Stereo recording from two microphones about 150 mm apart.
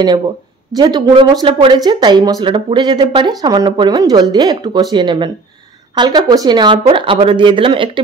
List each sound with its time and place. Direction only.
0.7 s speech: 30° right (ahead or behind)